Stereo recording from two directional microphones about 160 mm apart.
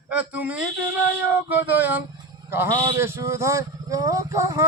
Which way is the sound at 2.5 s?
15° right (ahead or behind).